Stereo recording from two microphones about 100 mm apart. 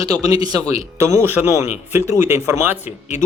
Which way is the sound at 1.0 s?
30° right (ahead or behind).